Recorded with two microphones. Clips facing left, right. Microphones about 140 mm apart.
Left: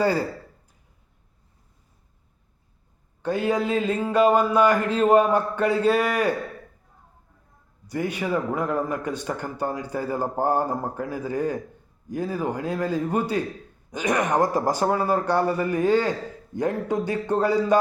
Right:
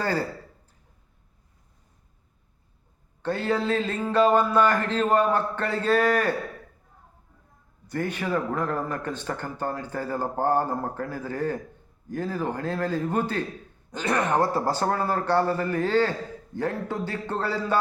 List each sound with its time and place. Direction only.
0.0 s a man's voice: 10° left (ahead or behind)
3.2 s a man's voice: 10° left (ahead or behind)
7.9 s a man's voice: 10° left (ahead or behind)